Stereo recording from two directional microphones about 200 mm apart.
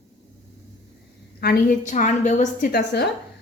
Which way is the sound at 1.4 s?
45° left (ahead or behind).